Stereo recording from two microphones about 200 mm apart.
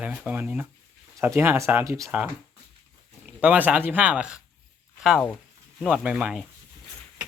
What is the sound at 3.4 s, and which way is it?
Speech, 10° right (ahead or behind).